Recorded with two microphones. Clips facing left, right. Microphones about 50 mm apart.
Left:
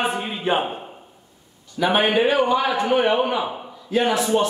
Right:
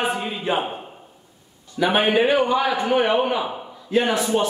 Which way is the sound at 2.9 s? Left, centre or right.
Centre.